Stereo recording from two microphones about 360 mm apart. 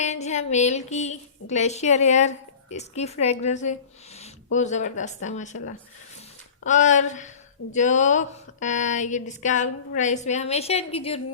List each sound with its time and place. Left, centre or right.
0.0 s a woman's voice: centre
6.7 s a woman's voice: centre